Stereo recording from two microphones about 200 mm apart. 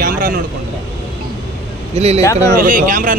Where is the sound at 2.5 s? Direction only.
45° right (ahead or behind).